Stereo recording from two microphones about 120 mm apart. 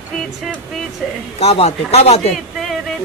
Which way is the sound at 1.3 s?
65° left (ahead or behind).